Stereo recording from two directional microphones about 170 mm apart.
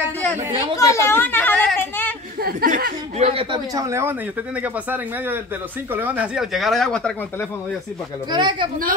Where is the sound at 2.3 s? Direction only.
60° right (ahead or behind); by 7.4 s 5° left (ahead or behind).